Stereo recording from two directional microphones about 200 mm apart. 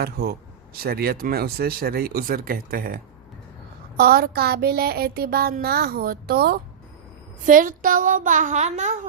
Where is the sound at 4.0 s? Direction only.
50° right (ahead or behind).